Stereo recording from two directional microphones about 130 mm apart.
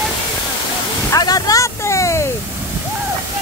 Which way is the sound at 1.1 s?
30° left (ahead or behind).